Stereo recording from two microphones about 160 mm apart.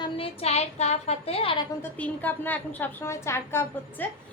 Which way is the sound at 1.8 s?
10° left (ahead or behind).